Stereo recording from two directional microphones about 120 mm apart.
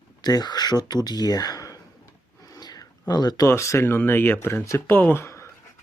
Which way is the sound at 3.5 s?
25° left (ahead or behind).